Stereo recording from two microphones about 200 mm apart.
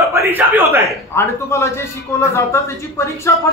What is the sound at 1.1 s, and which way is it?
Speech, 15° left (ahead or behind).